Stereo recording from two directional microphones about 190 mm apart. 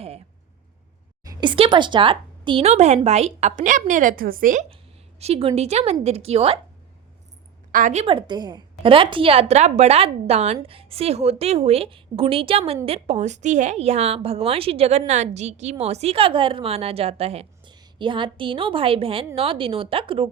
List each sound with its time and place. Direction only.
1.2 s a woman's voice: 20° right (ahead or behind); by 4.6 s 45° right (ahead or behind)
5.2 s a woman's voice: 35° right (ahead or behind)
7.7 s a woman's voice: 45° right (ahead or behind)
8.0 s a woman's voice: 25° right (ahead or behind)